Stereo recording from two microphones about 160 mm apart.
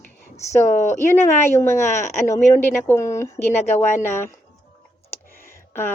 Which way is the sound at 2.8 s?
15° left (ahead or behind).